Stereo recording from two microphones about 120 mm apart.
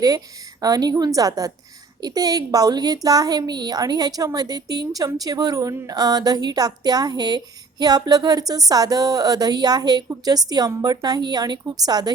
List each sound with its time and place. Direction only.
0.6 s speech: 30° right (ahead or behind)